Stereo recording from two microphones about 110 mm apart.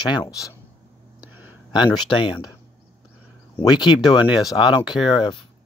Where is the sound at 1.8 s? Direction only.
45° left (ahead or behind).